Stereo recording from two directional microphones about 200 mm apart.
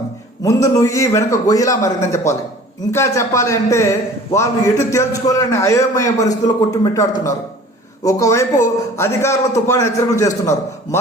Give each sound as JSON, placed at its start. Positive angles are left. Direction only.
{"t": 0.4, "sound": "a man's voice", "side_deg": 15}